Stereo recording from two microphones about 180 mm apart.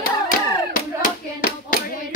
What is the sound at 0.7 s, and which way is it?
Clapping, 50° left (ahead or behind).